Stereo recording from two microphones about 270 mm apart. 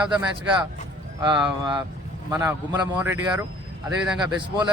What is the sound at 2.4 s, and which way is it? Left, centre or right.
A man's voice, centre.